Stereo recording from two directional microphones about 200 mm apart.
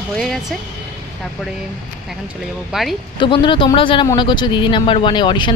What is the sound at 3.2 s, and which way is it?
Speech, 25° left (ahead or behind).